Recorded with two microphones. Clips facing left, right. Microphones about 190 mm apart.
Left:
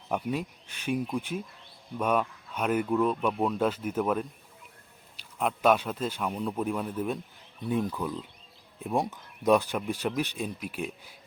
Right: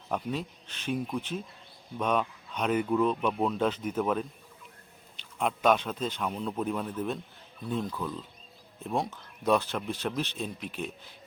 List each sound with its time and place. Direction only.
0.1 s a man's voice: 10° left (ahead or behind)
5.4 s a man's voice: 5° left (ahead or behind)